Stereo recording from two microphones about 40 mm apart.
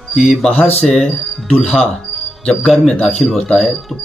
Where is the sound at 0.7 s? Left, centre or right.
Centre.